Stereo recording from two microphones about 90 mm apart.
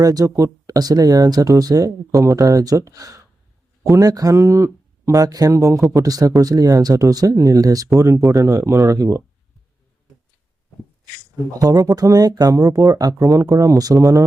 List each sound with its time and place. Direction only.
0.0 s speech: 45° right (ahead or behind)
11.6 s speech: 40° right (ahead or behind)